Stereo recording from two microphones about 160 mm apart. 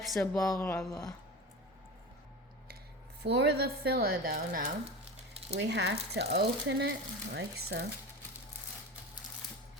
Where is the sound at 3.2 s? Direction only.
90° right; by 4.6 s 70° right (ahead or behind).